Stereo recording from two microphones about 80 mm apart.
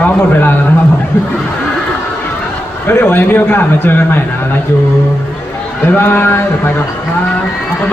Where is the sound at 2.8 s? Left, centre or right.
Left.